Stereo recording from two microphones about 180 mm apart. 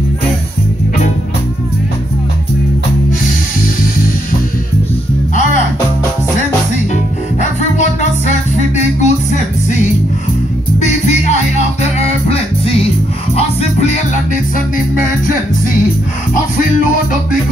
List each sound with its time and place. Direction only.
8.7 s music: 40° left (ahead or behind)
10.8 s music: 40° left (ahead or behind)
13.6 s music: 40° left (ahead or behind)